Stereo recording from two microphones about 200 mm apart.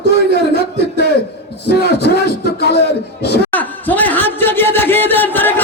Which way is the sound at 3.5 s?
10° left (ahead or behind).